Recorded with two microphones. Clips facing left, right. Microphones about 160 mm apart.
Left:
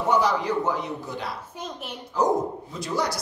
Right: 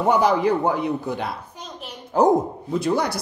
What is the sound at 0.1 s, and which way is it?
Speech, 55° right (ahead or behind).